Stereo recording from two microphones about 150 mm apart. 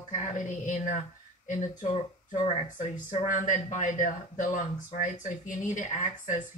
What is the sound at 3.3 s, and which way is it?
A man's voice, 60° left (ahead or behind).